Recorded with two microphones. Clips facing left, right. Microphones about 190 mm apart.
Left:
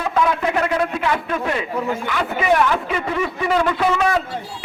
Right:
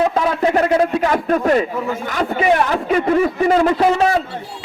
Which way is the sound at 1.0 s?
40° right (ahead or behind).